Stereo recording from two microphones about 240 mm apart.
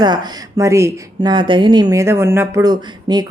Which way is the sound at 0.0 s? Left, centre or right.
Centre.